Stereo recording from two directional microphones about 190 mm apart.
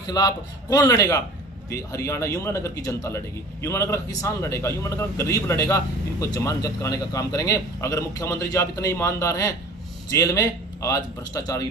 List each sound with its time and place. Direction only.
0.1 s a man's voice: 20° left (ahead or behind)